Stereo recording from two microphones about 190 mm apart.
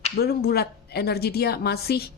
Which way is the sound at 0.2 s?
55° left (ahead or behind).